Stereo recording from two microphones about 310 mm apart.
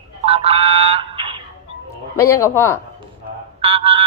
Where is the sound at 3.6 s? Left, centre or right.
Centre.